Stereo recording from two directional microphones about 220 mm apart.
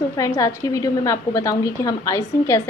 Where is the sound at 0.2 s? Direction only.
15° left (ahead or behind).